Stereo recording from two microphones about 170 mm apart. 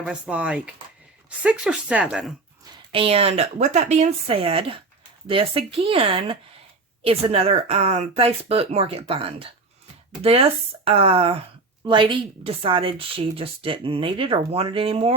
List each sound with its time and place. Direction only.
0.0 s speech: 5° right (ahead or behind)
2.9 s speech: 35° right (ahead or behind)